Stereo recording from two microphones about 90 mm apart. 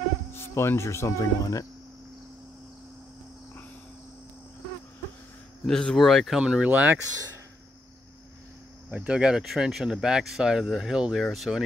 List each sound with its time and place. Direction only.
0.3 s speech: 25° left (ahead or behind)
5.7 s speech: 5° left (ahead or behind)
6.4 s speech: 10° right (ahead or behind)
8.9 s speech: 10° right (ahead or behind)